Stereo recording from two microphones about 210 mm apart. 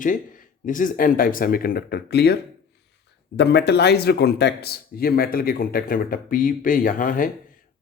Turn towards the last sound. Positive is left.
turn(degrees=40)  # may be behind; listen again after turning